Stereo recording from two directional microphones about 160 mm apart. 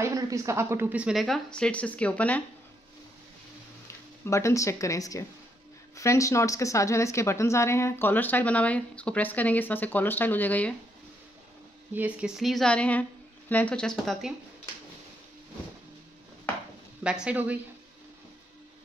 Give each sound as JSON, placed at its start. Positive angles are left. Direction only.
{"t": 0.0, "sound": "speech", "side_deg": -20}
{"t": 3.8, "sound": "speech", "side_deg": 15}
{"t": 11.9, "sound": "speech", "side_deg": -10}
{"t": 17.0, "sound": "speech", "side_deg": -5}